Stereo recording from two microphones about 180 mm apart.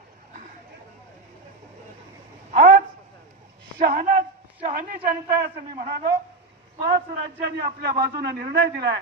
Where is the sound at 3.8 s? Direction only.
55° right (ahead or behind).